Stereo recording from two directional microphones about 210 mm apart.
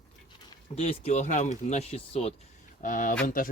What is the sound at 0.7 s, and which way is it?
Speech, 30° left (ahead or behind).